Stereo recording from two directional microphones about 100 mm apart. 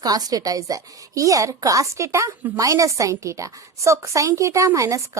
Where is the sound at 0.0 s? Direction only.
40° right (ahead or behind).